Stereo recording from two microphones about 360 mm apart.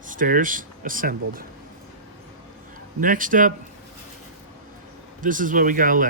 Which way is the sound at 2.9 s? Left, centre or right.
Right.